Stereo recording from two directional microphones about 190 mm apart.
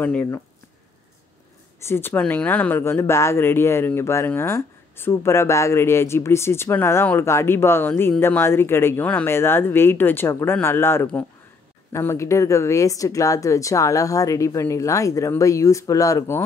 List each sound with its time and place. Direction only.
0.0 s speech: 10° left (ahead or behind)
1.9 s speech: 10° left (ahead or behind)